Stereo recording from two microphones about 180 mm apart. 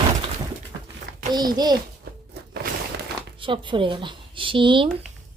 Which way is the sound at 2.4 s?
65° right (ahead or behind).